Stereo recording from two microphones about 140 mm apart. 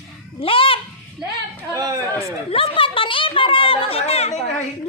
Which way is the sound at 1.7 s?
25° right (ahead or behind).